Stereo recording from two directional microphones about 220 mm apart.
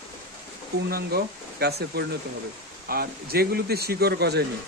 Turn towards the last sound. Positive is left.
turn(degrees=-45)  # may be behind; listen again after turning